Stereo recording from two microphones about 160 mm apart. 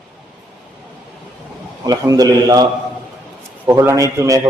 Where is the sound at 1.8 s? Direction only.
20° right (ahead or behind).